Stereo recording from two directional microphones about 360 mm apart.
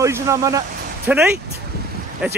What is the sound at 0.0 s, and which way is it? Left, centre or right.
Speech, centre.